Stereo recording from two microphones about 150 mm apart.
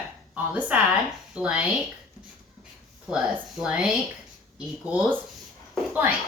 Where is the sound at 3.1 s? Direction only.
5° right (ahead or behind).